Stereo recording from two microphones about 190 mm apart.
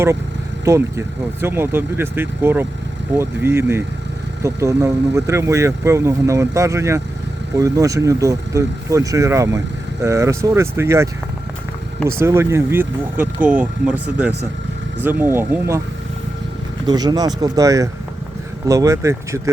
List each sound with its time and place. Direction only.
0.6 s speech: 15° right (ahead or behind)
12.2 s speech: 15° right (ahead or behind)
16.8 s speech: 20° right (ahead or behind)